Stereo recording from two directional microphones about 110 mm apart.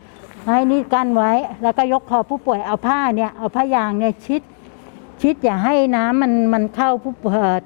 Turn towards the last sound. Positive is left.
turn(degrees=20)  # may be behind; listen again after turning